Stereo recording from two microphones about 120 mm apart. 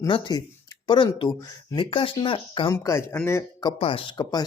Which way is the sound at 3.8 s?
45° left (ahead or behind).